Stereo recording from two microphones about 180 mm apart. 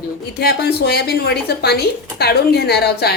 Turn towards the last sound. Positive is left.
turn(degrees=65)  # may be behind; listen again after turning